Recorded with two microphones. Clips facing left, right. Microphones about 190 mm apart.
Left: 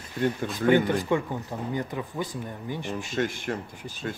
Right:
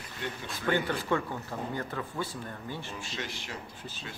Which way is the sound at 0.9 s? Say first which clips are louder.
Left 5 dB; 15° left (ahead or behind).